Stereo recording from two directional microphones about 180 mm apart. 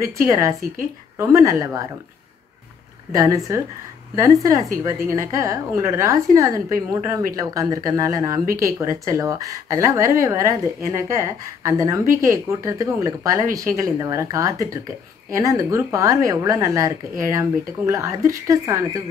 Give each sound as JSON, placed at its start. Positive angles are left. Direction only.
{"t": 0.0, "sound": "a woman's voice", "side_deg": -20}
{"t": 3.1, "sound": "a woman's voice", "side_deg": -20}